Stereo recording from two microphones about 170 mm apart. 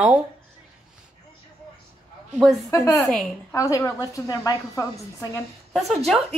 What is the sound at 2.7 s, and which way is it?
A woman's voice, 20° left (ahead or behind).